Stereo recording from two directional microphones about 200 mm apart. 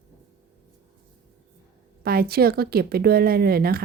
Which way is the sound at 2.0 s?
50° right (ahead or behind).